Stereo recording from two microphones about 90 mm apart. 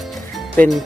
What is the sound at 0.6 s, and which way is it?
Speech, 20° left (ahead or behind).